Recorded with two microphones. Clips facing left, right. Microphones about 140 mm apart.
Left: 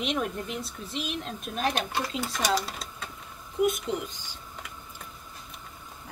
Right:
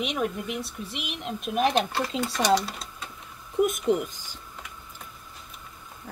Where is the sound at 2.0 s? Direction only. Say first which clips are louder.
Right 3 dB; 5° left (ahead or behind).